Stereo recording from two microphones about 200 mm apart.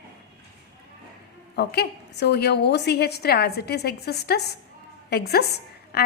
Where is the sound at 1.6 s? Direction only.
55° left (ahead or behind).